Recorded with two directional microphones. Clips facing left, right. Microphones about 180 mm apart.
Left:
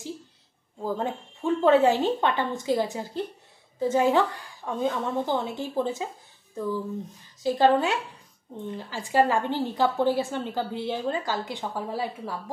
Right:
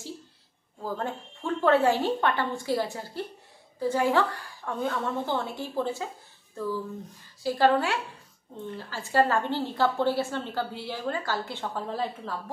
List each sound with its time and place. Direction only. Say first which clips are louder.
0.8 s a woman's voice: left 3 dB; 20° left (ahead or behind)
7.4 s a woman's voice: left 2 dB; 20° left (ahead or behind)